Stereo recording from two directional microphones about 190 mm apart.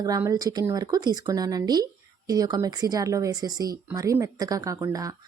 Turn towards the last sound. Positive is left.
turn(degrees=-20)  # may be behind; listen again after turning